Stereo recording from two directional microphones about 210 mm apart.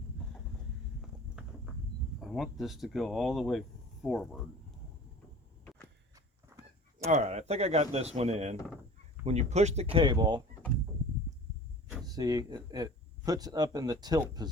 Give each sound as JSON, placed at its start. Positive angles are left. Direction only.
{"t": 2.2, "sound": "speech", "side_deg": 0}
{"t": 6.1, "sound": "walk", "side_deg": -15}
{"t": 7.1, "sound": "speech", "side_deg": -35}
{"t": 12.0, "sound": "speech", "side_deg": -20}